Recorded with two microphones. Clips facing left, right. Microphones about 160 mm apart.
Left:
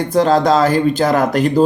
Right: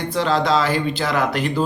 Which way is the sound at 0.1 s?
45° left (ahead or behind).